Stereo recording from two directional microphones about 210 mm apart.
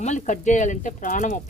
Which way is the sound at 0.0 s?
35° left (ahead or behind).